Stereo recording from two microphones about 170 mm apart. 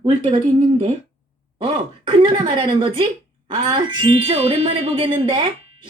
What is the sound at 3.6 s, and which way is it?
Music, 25° right (ahead or behind).